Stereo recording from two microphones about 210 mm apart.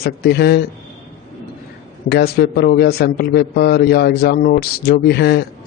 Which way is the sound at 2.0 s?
50° left (ahead or behind).